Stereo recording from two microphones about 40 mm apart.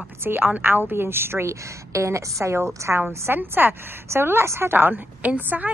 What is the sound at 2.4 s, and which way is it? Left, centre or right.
A woman's voice, right.